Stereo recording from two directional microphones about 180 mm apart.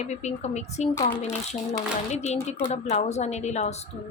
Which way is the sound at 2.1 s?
40° left (ahead or behind).